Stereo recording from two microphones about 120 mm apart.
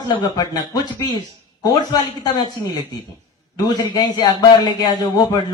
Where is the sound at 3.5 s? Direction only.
35° left (ahead or behind).